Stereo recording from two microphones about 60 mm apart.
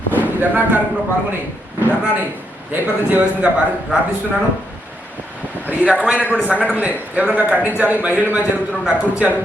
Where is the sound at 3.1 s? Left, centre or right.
Right.